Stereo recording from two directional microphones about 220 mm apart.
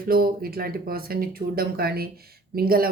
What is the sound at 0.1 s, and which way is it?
Speech, 45° right (ahead or behind).